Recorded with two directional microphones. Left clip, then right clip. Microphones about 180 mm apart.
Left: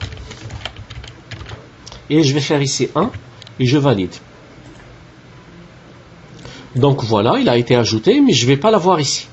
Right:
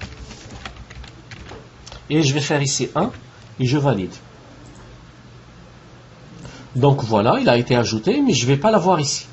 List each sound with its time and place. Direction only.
1.9 s speech: 15° right (ahead or behind)
6.8 s speech: 15° right (ahead or behind)